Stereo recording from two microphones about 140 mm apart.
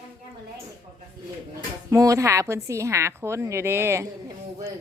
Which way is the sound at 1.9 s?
20° right (ahead or behind).